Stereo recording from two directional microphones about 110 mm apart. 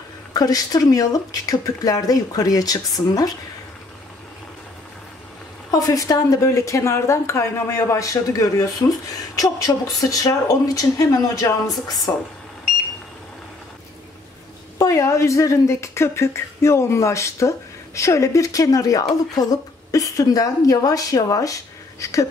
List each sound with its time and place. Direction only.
0.3 s speech: 35° left (ahead or behind)
5.7 s speech: 35° left (ahead or behind)
9.9 s speech: 30° left (ahead or behind)
14.8 s speech: 30° left (ahead or behind)